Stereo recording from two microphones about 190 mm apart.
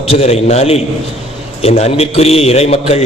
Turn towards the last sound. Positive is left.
turn(degrees=35)  # may be behind; listen again after turning